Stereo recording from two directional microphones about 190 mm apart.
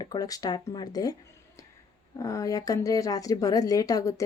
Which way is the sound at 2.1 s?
20° left (ahead or behind).